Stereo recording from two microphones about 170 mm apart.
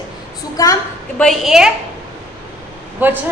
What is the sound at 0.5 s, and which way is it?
Speech, 20° left (ahead or behind).